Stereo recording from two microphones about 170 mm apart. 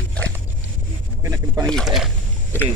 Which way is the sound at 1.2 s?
20° right (ahead or behind).